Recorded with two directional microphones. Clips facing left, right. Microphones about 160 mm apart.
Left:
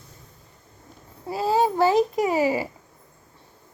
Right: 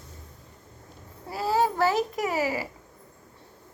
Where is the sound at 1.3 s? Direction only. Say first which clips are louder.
Left 3 dB; 20° left (ahead or behind).